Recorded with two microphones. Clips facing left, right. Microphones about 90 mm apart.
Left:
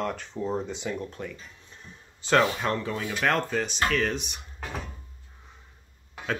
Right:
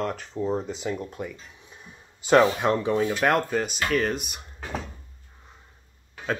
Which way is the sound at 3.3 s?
5° right (ahead or behind).